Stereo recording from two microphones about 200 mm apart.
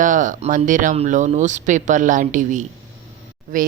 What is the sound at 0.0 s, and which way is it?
Speech, 40° right (ahead or behind).